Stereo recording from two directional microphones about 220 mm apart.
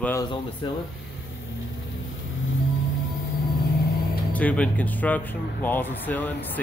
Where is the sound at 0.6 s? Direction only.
20° left (ahead or behind).